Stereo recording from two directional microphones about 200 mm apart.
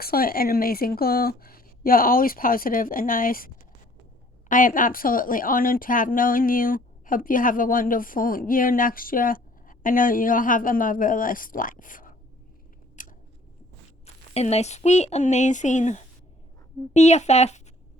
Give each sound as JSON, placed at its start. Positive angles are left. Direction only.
{"t": 0.0, "sound": "a woman's voice", "side_deg": 50}
{"t": 13.0, "sound": "scissors", "side_deg": 40}
{"t": 14.0, "sound": "speech", "side_deg": 30}